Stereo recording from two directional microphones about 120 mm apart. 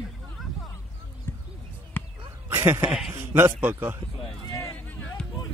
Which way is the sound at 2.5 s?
20° right (ahead or behind).